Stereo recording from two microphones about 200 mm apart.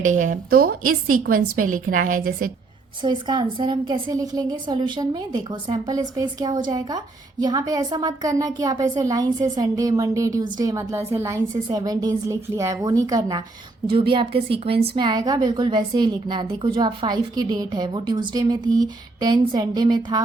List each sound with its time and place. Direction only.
0.0 s a woman's voice: 40° right (ahead or behind)
3.0 s a woman's voice: 25° right (ahead or behind)